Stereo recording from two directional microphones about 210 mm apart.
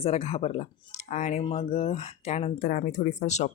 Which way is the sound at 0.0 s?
30° left (ahead or behind).